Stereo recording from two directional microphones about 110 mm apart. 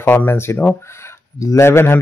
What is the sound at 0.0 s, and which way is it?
Speech, 20° left (ahead or behind).